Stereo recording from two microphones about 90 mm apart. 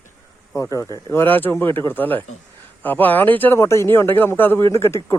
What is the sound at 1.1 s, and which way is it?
Speech, 25° left (ahead or behind).